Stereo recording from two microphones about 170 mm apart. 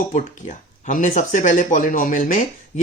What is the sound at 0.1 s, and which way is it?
Speech, 50° left (ahead or behind).